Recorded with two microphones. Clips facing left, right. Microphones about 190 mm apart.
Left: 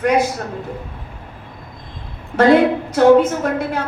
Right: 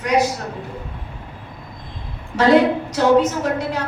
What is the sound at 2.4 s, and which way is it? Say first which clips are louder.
A woman's voice: left 2 dB; 55° left (ahead or behind).